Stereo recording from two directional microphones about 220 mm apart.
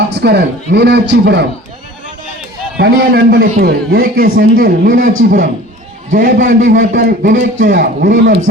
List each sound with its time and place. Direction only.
0.1 s a man's voice: 50° right (ahead or behind)
2.7 s a man's voice: 45° right (ahead or behind)
8.2 s a man's voice: 55° right (ahead or behind)